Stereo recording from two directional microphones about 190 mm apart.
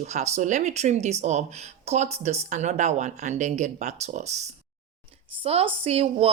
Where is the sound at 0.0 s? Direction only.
35° right (ahead or behind).